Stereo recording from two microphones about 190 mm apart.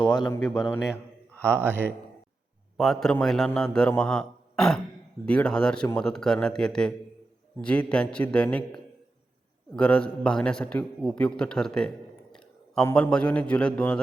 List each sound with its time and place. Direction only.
0.1 s a man's voice: 20° left (ahead or behind)
0.3 s a man's voice: 5° left (ahead or behind)
1.4 s speech: 10° right (ahead or behind)
2.7 s a man's voice: centre (ahead or behind)
12.3 s a sound: 5° left (ahead or behind)
12.8 s a man's voice: 5° left (ahead or behind)